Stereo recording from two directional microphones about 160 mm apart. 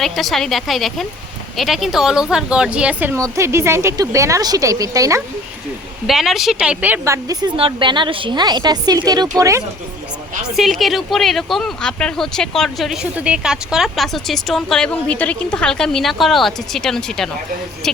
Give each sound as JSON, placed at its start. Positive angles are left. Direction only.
{"t": 0.0, "sound": "speech", "side_deg": 0}
{"t": 6.1, "sound": "speech", "side_deg": 0}
{"t": 7.5, "sound": "speech", "side_deg": -35}
{"t": 10.5, "sound": "speech", "side_deg": 0}